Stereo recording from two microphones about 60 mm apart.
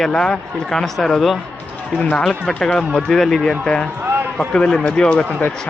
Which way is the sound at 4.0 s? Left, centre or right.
Right.